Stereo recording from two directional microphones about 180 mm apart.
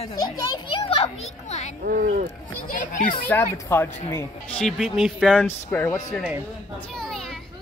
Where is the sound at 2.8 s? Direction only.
45° left (ahead or behind).